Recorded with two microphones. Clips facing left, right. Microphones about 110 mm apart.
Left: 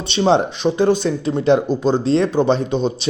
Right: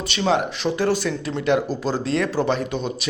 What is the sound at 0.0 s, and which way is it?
Speech, 25° left (ahead or behind).